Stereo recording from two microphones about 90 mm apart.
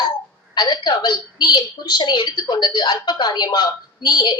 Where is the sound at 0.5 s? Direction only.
50° left (ahead or behind).